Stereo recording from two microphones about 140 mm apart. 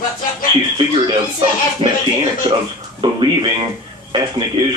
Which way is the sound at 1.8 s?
50° right (ahead or behind).